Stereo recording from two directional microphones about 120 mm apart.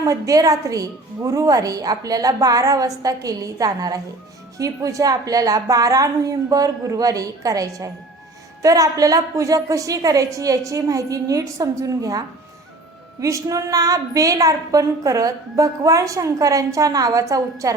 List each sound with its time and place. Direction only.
0.0 s a woman's voice: 30° right (ahead or behind)
13.2 s a woman's voice: 25° right (ahead or behind)